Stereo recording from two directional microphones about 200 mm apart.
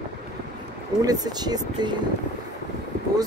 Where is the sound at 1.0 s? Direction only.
20° right (ahead or behind).